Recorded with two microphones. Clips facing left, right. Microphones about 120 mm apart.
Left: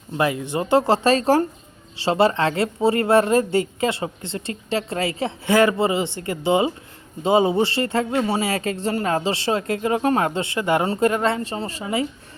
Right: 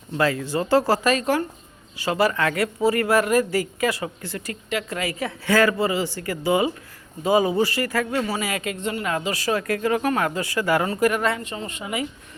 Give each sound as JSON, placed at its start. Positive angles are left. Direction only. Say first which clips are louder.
{"t": 0.2, "sound": "speech", "louder": "even", "side_deg": 20}